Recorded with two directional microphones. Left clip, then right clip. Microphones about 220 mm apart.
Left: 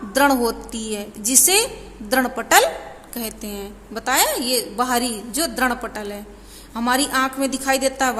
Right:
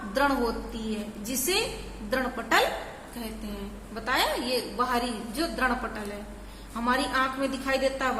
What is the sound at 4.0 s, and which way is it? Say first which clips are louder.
A woman's voice: left 7 dB; 50° left (ahead or behind).